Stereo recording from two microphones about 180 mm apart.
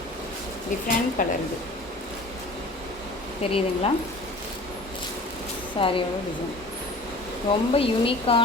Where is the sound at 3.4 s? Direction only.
30° left (ahead or behind).